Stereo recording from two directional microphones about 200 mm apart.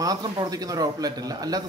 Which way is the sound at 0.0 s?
20° right (ahead or behind).